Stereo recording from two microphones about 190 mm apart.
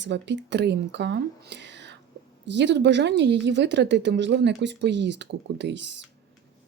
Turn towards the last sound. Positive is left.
turn(degrees=-70)  # may be behind; listen again after turning